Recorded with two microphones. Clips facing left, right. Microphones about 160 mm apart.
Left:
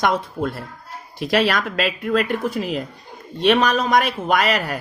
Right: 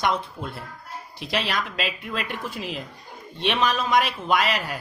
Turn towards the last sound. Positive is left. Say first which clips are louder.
# left 4 dB
turn(degrees=45)  # may be behind; listen again after turning